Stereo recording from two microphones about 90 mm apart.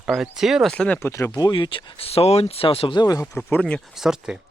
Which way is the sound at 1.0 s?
30° left (ahead or behind).